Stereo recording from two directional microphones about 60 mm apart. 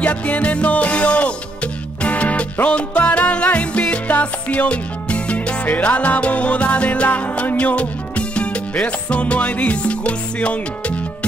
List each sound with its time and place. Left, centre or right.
0.0 s music: left